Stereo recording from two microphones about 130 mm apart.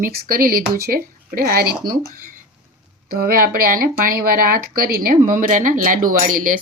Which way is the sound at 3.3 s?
90° right.